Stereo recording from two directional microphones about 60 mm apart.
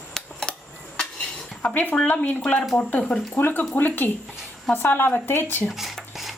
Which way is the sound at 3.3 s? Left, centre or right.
Left.